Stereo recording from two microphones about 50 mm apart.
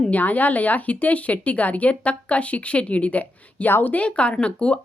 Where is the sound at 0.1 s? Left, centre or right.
Left.